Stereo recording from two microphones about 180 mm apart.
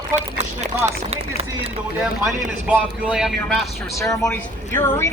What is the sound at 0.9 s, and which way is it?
Speech, 35° right (ahead or behind).